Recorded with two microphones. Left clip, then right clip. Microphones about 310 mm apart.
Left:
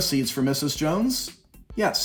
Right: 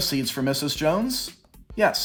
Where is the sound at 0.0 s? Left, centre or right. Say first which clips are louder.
Left 1 dB; right.